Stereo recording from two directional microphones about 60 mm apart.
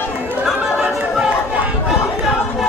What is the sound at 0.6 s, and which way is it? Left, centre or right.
Chatter, centre.